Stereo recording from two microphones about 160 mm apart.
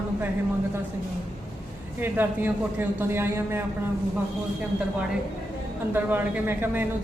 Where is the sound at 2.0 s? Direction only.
10° right (ahead or behind).